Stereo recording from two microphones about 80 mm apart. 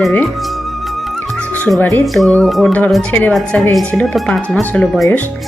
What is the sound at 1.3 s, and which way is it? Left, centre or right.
Music, centre.